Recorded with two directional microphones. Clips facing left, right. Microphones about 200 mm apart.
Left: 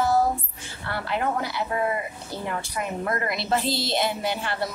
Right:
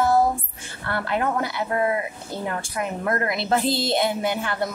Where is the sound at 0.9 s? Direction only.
55° right (ahead or behind).